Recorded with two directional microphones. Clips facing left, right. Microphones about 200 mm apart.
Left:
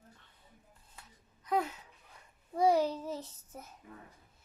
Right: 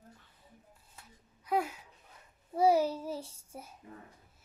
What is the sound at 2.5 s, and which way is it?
Child singing, 5° right (ahead or behind).